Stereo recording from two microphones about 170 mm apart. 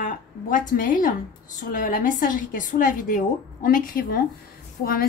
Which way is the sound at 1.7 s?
55° left (ahead or behind).